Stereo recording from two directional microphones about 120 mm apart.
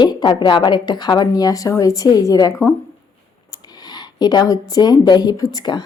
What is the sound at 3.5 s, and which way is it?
Speech, 35° left (ahead or behind).